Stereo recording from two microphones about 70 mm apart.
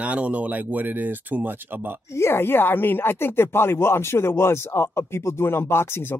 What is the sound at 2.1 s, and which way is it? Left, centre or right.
Speech, left.